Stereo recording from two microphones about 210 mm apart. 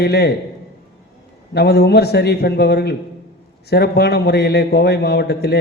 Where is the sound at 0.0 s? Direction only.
50° left (ahead or behind).